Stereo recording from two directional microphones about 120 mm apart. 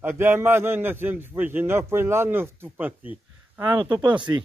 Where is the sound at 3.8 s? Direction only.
40° right (ahead or behind).